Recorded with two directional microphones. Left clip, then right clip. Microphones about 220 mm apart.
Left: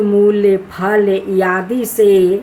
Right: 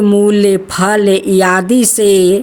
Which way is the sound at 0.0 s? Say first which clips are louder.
Right 1 dB; 50° right (ahead or behind).